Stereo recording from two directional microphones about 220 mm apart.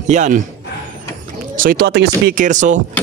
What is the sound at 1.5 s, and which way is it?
Speech, 40° right (ahead or behind).